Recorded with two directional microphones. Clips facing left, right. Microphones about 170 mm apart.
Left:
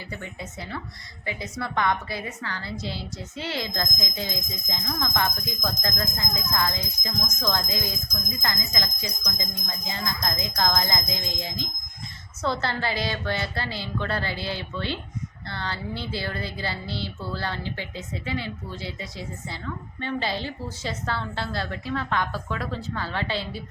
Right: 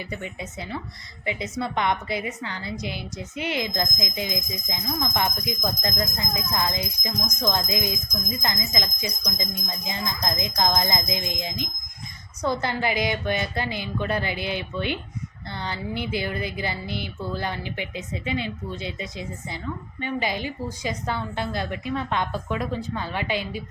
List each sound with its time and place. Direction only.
1.2 s a woman's voice: 20° right (ahead or behind)